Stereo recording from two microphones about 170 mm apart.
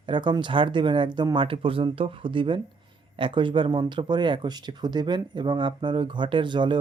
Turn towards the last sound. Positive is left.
turn(degrees=-25)  # may be behind; listen again after turning